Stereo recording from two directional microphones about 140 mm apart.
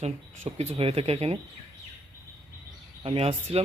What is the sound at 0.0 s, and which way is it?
Speech, 45° right (ahead or behind).